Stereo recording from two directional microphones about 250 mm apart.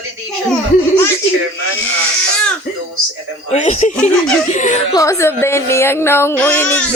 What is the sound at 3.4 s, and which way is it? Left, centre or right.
Speech, left.